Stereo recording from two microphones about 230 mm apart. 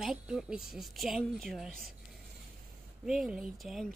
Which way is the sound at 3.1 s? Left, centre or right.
Centre.